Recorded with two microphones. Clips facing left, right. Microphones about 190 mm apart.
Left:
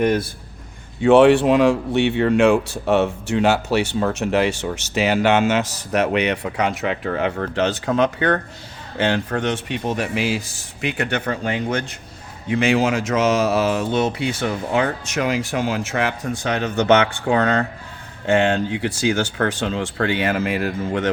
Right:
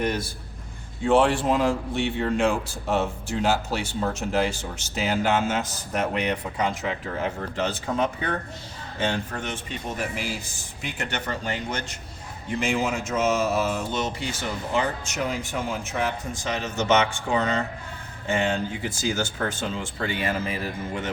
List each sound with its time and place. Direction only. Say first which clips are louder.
0.0 s a man's voice: left 8 dB; 60° left (ahead or behind)
1.0 s speech: left 8 dB; 70° left (ahead or behind)
12.5 s speech: left 7 dB; 85° left; by 17.7 s 60° left (ahead or behind)
18.3 s speech: left 7 dB; 75° left (ahead or behind)